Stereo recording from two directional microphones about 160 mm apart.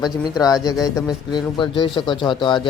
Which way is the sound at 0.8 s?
25° left (ahead or behind).